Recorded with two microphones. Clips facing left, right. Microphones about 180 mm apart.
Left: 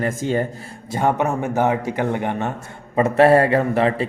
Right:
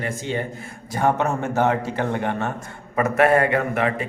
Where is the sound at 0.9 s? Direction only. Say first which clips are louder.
Left 1 dB; 20° left (ahead or behind).